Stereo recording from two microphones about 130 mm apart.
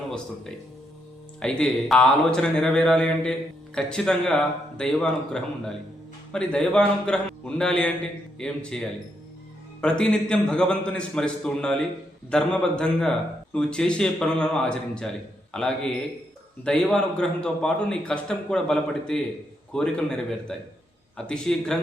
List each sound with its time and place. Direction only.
1.4 s a man's voice: 5° left (ahead or behind)